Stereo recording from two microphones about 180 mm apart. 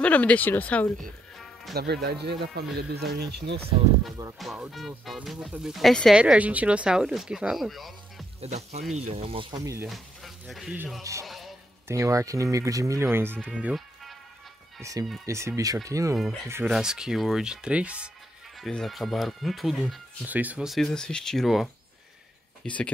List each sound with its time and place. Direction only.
0.0 s speech: 10° left (ahead or behind)
1.4 s music: centre (ahead or behind)
1.8 s speech: 60° right (ahead or behind)
4.4 s speech: centre (ahead or behind)
8.4 s speech: 35° right (ahead or behind); by 9.8 s 20° right (ahead or behind)
9.8 s speech: centre (ahead or behind)
11.1 s speech: 20° right (ahead or behind)
14.8 s speech: 20° right (ahead or behind)
16.6 s speech: 5° right (ahead or behind)